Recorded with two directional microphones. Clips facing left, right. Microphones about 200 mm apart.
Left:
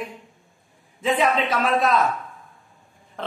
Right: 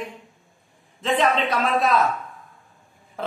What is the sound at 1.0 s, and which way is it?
A man's voice, 5° left (ahead or behind).